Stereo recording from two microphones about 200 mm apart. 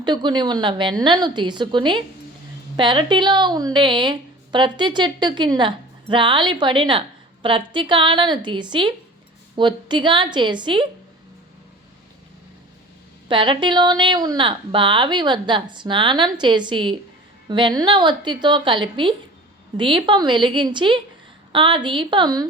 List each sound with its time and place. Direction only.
0.0 s a woman's voice: 20° right (ahead or behind)
13.2 s a woman's voice: 25° right (ahead or behind)